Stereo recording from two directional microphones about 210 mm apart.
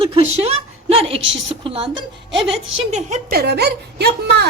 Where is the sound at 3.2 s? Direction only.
45° right (ahead or behind).